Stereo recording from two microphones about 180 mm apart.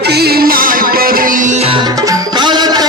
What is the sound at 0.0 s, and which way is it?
Music, 65° right (ahead or behind).